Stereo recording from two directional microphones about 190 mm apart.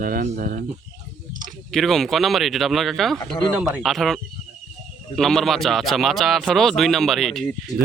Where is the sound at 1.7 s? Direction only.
Centre (ahead or behind).